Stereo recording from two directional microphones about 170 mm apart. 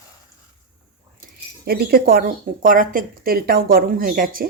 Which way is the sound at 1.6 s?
65° right (ahead or behind).